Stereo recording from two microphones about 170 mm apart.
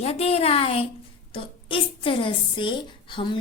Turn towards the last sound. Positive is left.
turn(degrees=30)  # may be behind; listen again after turning